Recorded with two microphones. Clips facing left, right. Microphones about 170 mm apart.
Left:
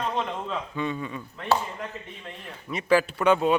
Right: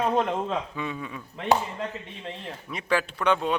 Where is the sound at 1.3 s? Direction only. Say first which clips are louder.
Right 2 dB; 25° right (ahead or behind).